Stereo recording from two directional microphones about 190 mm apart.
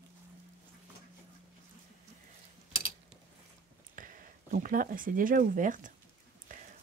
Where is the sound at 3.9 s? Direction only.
45° right (ahead or behind).